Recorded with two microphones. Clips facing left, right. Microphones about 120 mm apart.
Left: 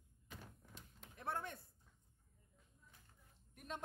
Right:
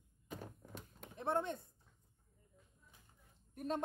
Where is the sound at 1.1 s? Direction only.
25° right (ahead or behind).